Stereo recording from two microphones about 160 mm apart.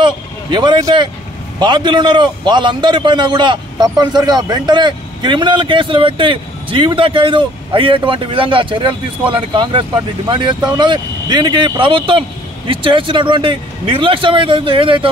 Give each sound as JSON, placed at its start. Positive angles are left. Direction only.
{"t": 0.0, "sound": "a man's voice", "side_deg": -30}